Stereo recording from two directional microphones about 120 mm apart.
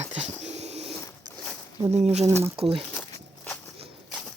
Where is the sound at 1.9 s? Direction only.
65° right (ahead or behind).